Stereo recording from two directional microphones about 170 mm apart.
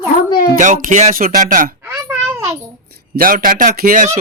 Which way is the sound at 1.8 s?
10° right (ahead or behind).